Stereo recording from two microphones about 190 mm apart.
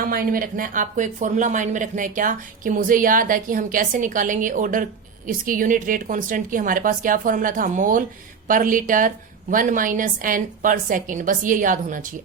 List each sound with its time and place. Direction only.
0.0 s speech: 50° right (ahead or behind)